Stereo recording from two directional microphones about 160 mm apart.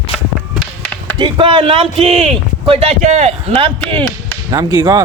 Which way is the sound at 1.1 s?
30° right (ahead or behind).